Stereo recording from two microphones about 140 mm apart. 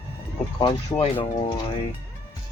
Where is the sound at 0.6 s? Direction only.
40° left (ahead or behind).